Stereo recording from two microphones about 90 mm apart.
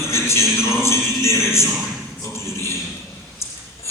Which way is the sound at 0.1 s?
30° left (ahead or behind).